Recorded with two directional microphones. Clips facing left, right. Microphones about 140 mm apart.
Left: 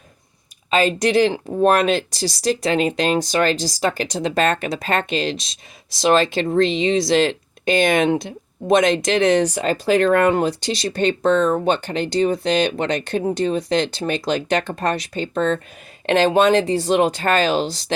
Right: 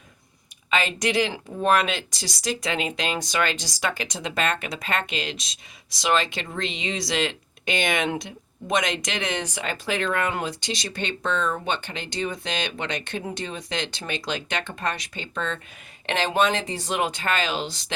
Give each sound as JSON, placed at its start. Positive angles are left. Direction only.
{"t": 0.7, "sound": "speech", "side_deg": 35}